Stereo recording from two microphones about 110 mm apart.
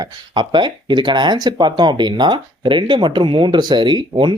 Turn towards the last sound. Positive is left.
turn(degrees=-45)  # may be behind; listen again after turning